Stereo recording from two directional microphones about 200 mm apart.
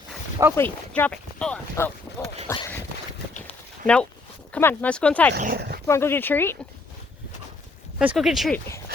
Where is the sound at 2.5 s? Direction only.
10° left (ahead or behind).